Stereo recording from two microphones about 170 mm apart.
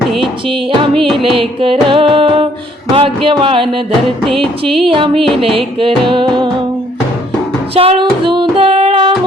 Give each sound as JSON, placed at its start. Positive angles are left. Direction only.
{"t": 0.4, "sound": "music", "side_deg": -30}
{"t": 0.9, "sound": "music", "side_deg": 0}
{"t": 1.2, "sound": "music", "side_deg": -30}
{"t": 7.8, "sound": "music", "side_deg": -30}